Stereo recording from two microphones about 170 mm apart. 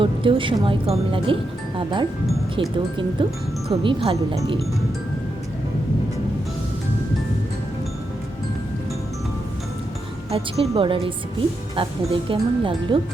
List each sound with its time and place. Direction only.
0.0 s speech: 30° right (ahead or behind)
2.6 s speech: 30° right (ahead or behind)
10.3 s speech: 35° right (ahead or behind)